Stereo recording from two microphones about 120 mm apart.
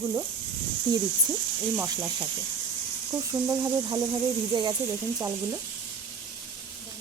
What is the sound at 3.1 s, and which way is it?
Speech, 25° right (ahead or behind).